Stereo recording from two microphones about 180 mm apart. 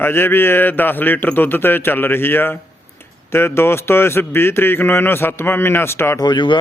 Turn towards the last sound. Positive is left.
turn(degrees=25)  # may be behind; listen again after turning